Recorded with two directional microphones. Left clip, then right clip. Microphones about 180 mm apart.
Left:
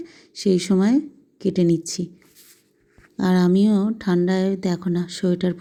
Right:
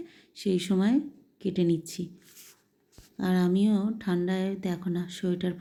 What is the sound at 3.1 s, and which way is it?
Speech, 35° left (ahead or behind).